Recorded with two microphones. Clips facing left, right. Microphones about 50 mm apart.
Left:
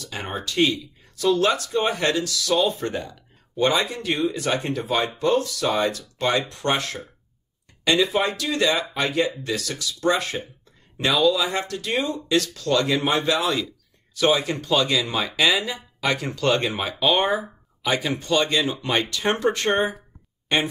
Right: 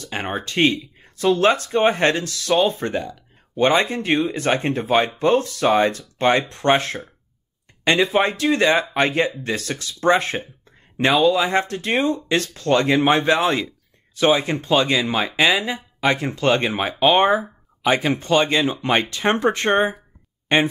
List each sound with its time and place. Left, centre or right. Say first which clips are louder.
0.0 s speech: right 4 dB; right